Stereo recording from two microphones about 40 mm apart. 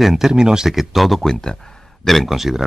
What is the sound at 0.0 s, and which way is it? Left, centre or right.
Speech, centre.